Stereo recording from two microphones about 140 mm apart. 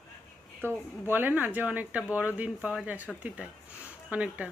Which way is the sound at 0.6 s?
15° right (ahead or behind).